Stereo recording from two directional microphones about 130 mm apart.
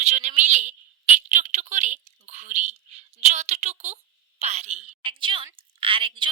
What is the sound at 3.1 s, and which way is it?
A woman's voice, 60° right (ahead or behind).